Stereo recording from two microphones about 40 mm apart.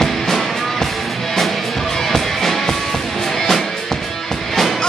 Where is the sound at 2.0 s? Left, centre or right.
Centre.